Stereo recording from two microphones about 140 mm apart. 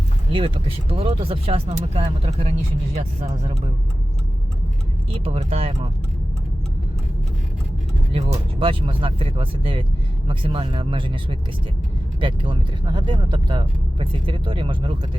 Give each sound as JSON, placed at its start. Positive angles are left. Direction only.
{"t": 0.3, "sound": "speech", "side_deg": -40}
{"t": 5.1, "sound": "speech", "side_deg": -45}
{"t": 8.5, "sound": "speech", "side_deg": -40}